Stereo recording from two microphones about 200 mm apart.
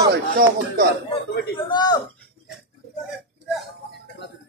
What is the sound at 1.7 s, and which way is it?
Speech, 20° left (ahead or behind).